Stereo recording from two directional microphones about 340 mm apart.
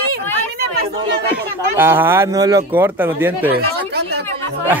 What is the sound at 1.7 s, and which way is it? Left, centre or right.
Speech, centre.